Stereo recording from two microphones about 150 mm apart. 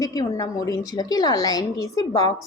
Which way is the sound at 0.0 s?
25° left (ahead or behind).